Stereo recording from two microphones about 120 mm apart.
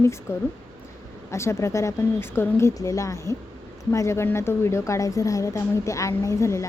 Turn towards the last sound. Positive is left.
turn(degrees=25)  # may be behind; listen again after turning